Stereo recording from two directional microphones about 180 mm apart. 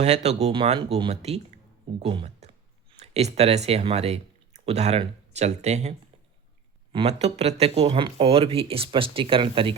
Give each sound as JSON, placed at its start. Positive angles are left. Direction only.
{"t": 0.0, "sound": "speech", "side_deg": -35}
{"t": 6.9, "sound": "speech", "side_deg": -35}